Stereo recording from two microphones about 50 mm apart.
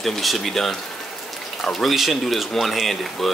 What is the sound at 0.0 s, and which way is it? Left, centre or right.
Speech, centre.